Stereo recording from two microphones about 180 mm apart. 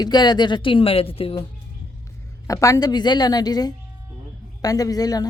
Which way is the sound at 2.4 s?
20° left (ahead or behind).